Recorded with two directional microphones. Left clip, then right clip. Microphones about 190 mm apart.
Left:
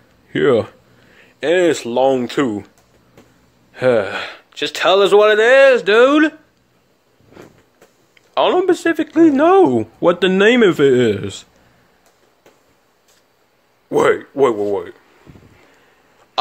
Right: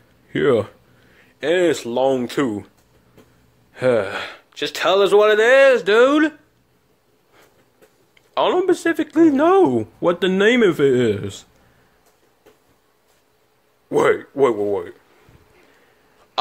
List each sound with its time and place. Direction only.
0.3 s speech: centre (ahead or behind)
3.7 s speech: 5° left (ahead or behind)
8.1 s speech: 5° left (ahead or behind)
13.8 s speech: centre (ahead or behind)